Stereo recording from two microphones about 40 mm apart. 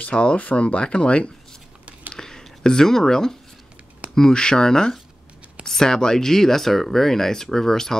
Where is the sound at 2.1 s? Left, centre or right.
Centre.